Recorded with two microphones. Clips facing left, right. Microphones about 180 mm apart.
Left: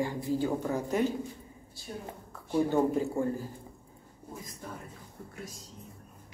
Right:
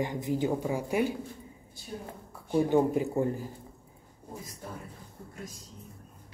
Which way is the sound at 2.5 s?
15° right (ahead or behind).